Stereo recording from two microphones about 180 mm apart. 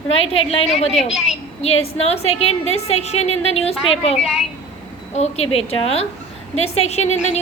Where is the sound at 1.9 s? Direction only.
35° left (ahead or behind).